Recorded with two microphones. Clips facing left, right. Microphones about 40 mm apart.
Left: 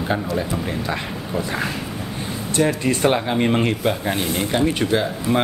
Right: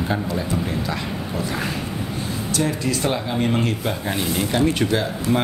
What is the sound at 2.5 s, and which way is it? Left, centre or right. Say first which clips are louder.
A man's voice: left 4 dB; left.